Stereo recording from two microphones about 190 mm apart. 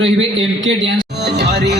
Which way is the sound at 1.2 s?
60° right (ahead or behind).